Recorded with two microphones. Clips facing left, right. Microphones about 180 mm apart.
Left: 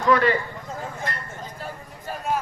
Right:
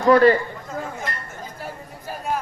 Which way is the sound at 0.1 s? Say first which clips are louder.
Right 6 dB; 40° right (ahead or behind).